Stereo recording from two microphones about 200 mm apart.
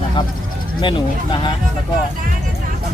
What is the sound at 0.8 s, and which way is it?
Speech, 25° left (ahead or behind).